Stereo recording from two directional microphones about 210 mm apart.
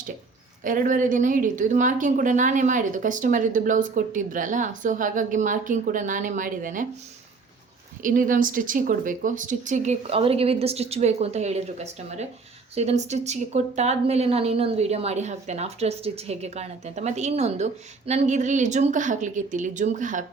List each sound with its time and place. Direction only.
0.6 s a woman's voice: 40° right (ahead or behind)
8.0 s a woman's voice: 40° right (ahead or behind)